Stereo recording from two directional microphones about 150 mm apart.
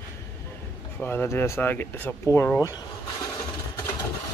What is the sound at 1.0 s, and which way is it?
Speech, 15° left (ahead or behind).